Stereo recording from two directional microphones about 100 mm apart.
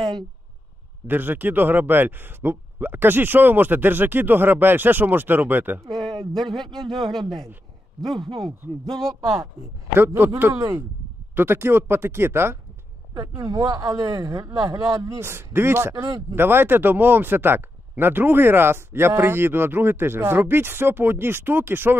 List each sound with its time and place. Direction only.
1.0 s speech: 20° right (ahead or behind)
5.9 s a man's voice: 5° left (ahead or behind)
9.9 s speech: 20° right (ahead or behind)
11.3 s speech: 20° right (ahead or behind)
13.4 s speech: 40° right (ahead or behind)
15.1 s speech: 25° right (ahead or behind)
15.9 s speech: 40° right (ahead or behind)
16.3 s speech: 20° right (ahead or behind)